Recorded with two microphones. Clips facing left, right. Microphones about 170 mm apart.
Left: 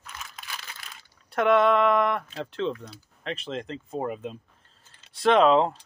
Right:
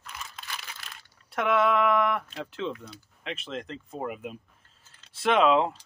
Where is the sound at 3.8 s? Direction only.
35° left (ahead or behind).